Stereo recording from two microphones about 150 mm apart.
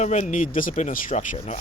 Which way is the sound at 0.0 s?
50° left (ahead or behind).